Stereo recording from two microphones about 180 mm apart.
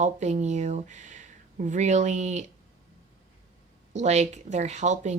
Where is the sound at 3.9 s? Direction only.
40° right (ahead or behind).